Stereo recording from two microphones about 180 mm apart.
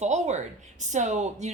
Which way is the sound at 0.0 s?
40° right (ahead or behind).